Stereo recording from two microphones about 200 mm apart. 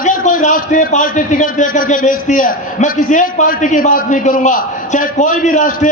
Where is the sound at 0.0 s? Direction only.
40° left (ahead or behind).